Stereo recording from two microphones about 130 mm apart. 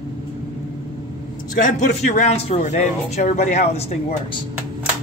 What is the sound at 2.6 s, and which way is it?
Speech, 70° left (ahead or behind).